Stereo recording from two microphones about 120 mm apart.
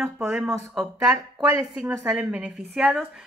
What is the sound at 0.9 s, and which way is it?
A woman's voice, 20° right (ahead or behind).